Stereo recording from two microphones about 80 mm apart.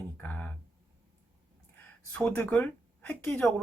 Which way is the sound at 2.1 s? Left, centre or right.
Centre.